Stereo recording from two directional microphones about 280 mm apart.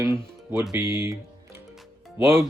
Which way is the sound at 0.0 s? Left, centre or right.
Centre.